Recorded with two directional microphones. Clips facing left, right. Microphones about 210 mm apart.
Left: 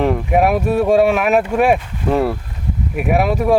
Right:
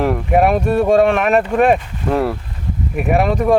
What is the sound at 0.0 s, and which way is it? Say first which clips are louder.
Speech: even; centre (ahead or behind).